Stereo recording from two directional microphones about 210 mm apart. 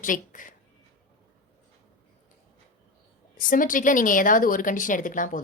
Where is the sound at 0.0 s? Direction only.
40° left (ahead or behind).